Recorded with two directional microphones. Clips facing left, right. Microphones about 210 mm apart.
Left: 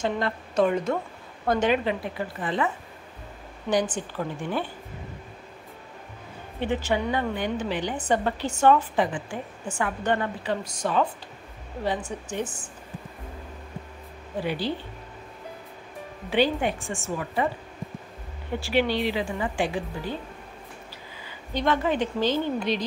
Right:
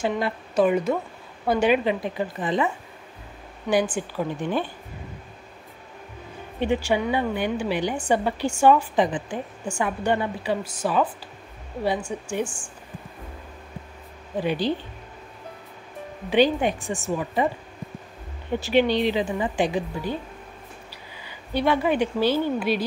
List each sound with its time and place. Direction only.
0.0 s a woman's voice: 10° right (ahead or behind)
3.9 s a woman's voice: 10° right (ahead or behind)
6.6 s a woman's voice: 15° right (ahead or behind)
14.4 s a woman's voice: 15° right (ahead or behind)
16.3 s a woman's voice: 15° right (ahead or behind)
18.6 s speech: 20° right (ahead or behind)
21.5 s a woman's voice: 10° right (ahead or behind)